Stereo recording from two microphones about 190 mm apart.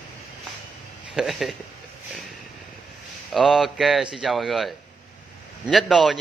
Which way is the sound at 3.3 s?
Centre (ahead or behind).